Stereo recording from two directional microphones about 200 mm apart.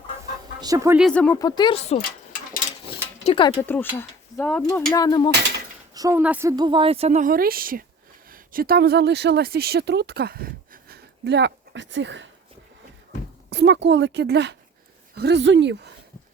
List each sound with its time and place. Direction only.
0.6 s speech: 15° right (ahead or behind)
0.9 s speech: 5° left (ahead or behind)
1.4 s speech: 20° left (ahead or behind)
2.0 s a sound: 45° left (ahead or behind)
3.2 s speech: 25° left (ahead or behind)
3.6 s speech: 10° left (ahead or behind)
4.9 s speech: 20° left (ahead or behind)
5.9 s speech: 15° right (ahead or behind)
6.6 s a woman's voice: 25° right (ahead or behind); by 12.3 s 65° right (ahead or behind)
13.5 s speech: 55° right (ahead or behind)